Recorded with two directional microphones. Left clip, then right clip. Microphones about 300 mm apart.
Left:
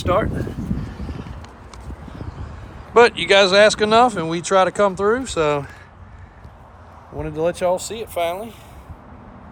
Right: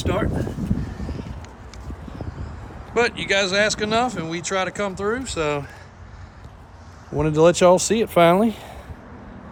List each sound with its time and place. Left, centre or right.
0.0 s a sound: centre
2.9 s speech: centre
7.4 s speech: right